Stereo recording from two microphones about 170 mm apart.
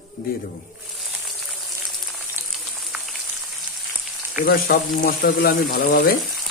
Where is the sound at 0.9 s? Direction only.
Centre (ahead or behind).